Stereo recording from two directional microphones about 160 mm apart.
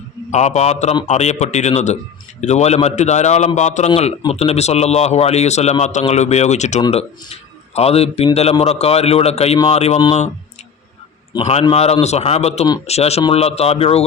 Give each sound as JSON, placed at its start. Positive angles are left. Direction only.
{"t": 0.3, "sound": "a man's voice", "side_deg": 45}
{"t": 11.3, "sound": "a man's voice", "side_deg": 40}